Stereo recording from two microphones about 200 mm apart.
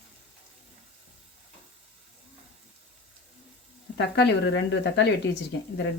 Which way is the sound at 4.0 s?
60° left (ahead or behind).